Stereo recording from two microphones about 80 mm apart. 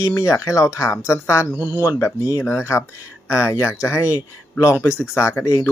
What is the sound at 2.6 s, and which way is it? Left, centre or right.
Speech, left.